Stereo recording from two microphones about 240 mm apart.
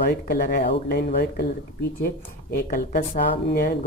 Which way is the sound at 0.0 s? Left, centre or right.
Left.